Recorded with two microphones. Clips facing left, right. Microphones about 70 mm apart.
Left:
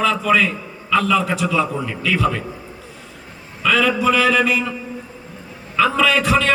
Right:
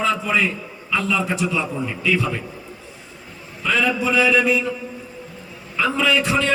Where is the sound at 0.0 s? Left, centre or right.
Left.